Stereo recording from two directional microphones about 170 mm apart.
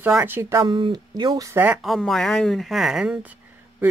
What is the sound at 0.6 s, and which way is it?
Speech, 25° right (ahead or behind).